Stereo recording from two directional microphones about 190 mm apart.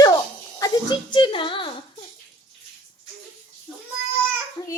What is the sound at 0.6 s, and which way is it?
Speech, 20° left (ahead or behind).